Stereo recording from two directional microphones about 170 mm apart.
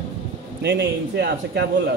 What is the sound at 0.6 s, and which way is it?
Speech, 90° right.